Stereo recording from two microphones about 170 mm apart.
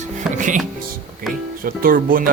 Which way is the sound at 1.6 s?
55° right (ahead or behind).